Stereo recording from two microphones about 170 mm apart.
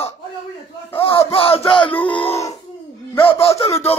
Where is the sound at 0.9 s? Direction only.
30° left (ahead or behind).